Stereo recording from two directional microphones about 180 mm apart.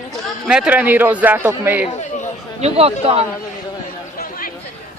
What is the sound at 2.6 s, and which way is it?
Speech, 35° right (ahead or behind).